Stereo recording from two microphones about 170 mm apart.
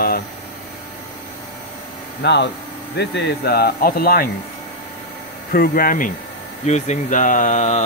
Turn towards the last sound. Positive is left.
turn(degrees=45)  # may be behind; listen again after turning